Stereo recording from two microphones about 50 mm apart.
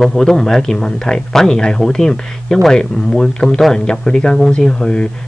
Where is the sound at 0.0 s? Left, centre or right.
Centre.